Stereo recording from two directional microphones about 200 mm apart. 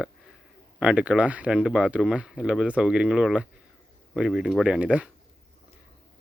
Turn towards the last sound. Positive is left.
turn(degrees=-5)  # may be behind; listen again after turning